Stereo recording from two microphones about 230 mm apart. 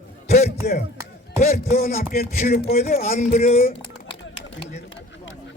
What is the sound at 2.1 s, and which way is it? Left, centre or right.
A man's voice, left.